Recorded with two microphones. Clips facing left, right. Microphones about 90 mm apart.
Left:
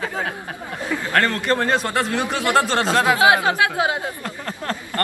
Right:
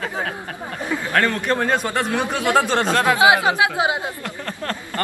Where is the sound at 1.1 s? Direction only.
Centre (ahead or behind).